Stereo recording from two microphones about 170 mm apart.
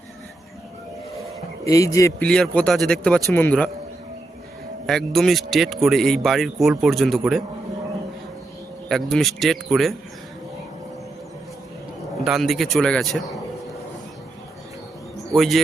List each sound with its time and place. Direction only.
1.6 s speech: 20° left (ahead or behind)
2.2 s speech: 5° left (ahead or behind)
4.9 s speech: centre (ahead or behind)
8.9 s speech: 5° left (ahead or behind)
12.2 s speech: centre (ahead or behind)
15.3 s speech: centre (ahead or behind)